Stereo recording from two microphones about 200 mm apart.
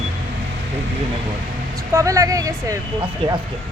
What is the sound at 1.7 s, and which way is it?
Speech, 15° right (ahead or behind).